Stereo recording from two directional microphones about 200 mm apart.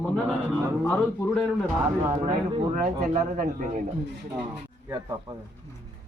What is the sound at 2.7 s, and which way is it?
Speech, 40° right (ahead or behind).